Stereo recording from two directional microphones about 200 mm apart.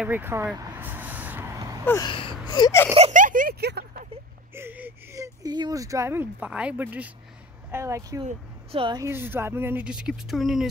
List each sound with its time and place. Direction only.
0.0 s vehicle: 10° right (ahead or behind)
1.9 s a sound: 20° left (ahead or behind)
2.9 s speech: 35° right (ahead or behind); by 4.1 s 50° right (ahead or behind)
4.6 s speech: 10° right (ahead or behind)
8.3 s speech: 25° right (ahead or behind); by 10.7 s centre (ahead or behind)